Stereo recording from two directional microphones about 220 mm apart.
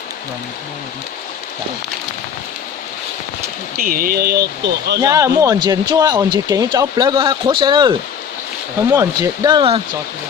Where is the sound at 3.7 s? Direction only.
40° right (ahead or behind).